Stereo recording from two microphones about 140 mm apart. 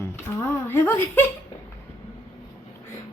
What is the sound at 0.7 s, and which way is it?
Music, 15° left (ahead or behind).